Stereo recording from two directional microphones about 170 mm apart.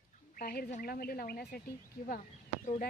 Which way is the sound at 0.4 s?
65° left (ahead or behind).